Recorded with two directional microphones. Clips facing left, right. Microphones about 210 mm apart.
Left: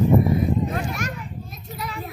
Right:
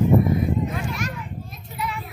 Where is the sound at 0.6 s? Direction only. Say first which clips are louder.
Left 1 dB; 40° left (ahead or behind).